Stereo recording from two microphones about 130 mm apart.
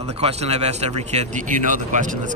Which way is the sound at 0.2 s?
55° right (ahead or behind).